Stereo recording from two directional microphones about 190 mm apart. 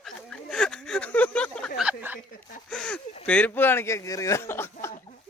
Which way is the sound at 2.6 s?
5° left (ahead or behind).